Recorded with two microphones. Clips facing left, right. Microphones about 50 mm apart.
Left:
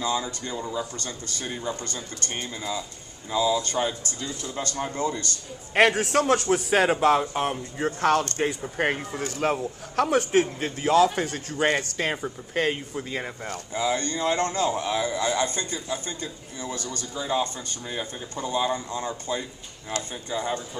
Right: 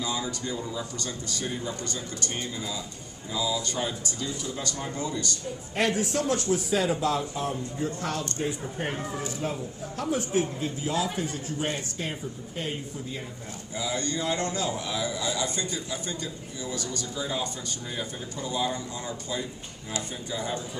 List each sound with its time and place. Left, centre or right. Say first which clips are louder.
0.0 s speech: left 3 dB; left
0.9 s a man's voice: right 1 dB; left
13.7 s speech: left 4 dB; left
17.2 s speech: left 9 dB; left
18.3 s speech: left 4 dB; left